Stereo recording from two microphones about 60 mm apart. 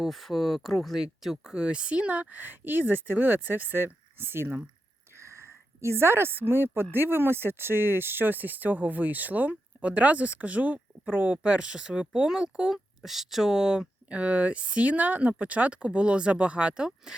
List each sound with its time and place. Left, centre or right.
0.0 s speech: centre; by 4.6 s right
5.1 s a sound: right
6.9 s speech: right; by 17.2 s centre